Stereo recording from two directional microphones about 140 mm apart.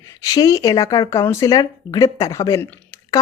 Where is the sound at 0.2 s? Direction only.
25° left (ahead or behind).